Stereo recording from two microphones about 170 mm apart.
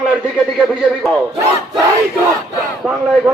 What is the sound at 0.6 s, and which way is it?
Music, centre (ahead or behind).